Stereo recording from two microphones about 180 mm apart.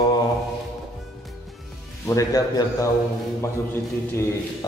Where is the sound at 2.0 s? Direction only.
20° left (ahead or behind).